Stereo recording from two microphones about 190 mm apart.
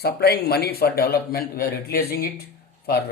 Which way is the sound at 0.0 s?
55° left (ahead or behind).